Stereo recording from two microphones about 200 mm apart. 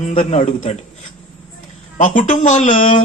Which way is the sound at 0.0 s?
35° left (ahead or behind).